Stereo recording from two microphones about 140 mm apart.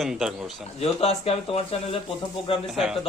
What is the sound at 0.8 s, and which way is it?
Speech, 45° left (ahead or behind).